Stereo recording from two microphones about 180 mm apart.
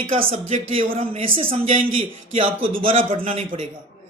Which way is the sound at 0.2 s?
35° right (ahead or behind).